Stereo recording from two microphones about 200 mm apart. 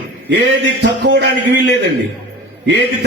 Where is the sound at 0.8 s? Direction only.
55° right (ahead or behind).